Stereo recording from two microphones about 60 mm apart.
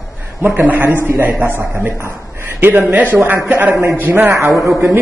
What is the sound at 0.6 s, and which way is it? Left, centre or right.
A man's voice, right.